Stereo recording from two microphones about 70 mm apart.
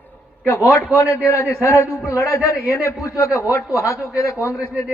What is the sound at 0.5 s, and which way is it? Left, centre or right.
A man's voice, left.